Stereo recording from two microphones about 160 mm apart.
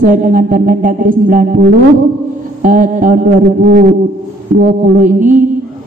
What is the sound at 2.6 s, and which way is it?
A man's voice, 55° right (ahead or behind).